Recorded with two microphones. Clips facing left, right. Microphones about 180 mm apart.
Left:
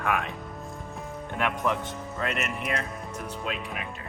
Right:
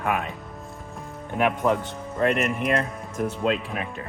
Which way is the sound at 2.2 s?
50° right (ahead or behind).